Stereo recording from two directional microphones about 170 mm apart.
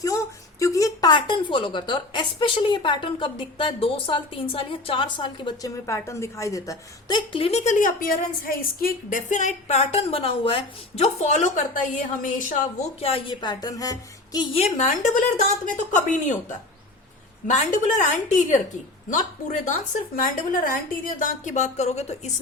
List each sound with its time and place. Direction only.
0.6 s a woman's voice: 20° left (ahead or behind); by 12.6 s 50° left (ahead or behind)
13.0 s a woman's voice: 35° left (ahead or behind)